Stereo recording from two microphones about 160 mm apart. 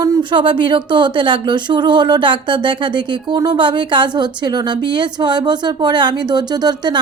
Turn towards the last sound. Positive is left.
turn(degrees=-25)  # may be behind; listen again after turning